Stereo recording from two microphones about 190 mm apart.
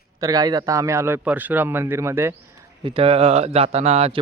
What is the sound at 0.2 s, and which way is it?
A man's voice, 20° right (ahead or behind).